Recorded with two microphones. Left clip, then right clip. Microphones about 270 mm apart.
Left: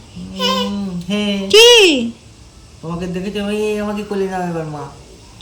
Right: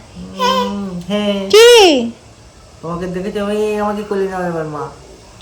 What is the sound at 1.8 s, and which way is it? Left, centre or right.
Speech, left.